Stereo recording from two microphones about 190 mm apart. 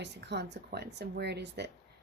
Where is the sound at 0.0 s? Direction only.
65° right (ahead or behind).